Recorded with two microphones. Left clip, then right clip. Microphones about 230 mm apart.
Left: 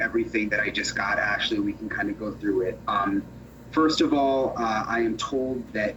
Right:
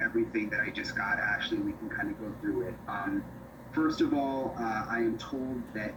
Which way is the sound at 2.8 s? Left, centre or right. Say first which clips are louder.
Left 11 dB; left.